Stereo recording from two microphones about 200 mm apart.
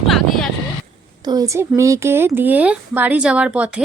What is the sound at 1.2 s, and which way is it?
Speech, 20° right (ahead or behind).